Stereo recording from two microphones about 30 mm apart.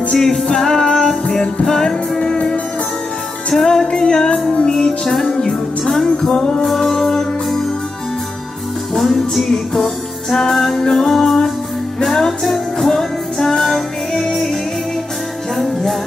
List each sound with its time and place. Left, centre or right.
0.1 s music: centre
3.4 s music: centre
3.8 s music: left
5.5 s music: centre
8.9 s music: centre
10.8 s music: centre
11.1 s music: centre